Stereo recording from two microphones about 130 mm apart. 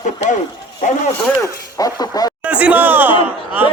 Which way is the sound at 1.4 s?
30° left (ahead or behind).